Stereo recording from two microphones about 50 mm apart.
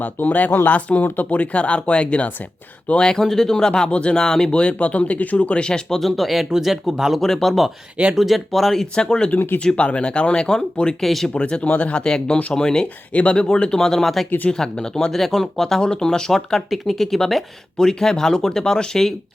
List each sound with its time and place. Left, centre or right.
0.0 s speech: left
3.0 s speech: centre
4.6 s speech: left
6.0 s speech: centre
7.2 s speech: centre
11.0 s speech: centre
11.3 s speech: left
12.0 s speech: centre
14.3 s speech: left
14.5 s speech: centre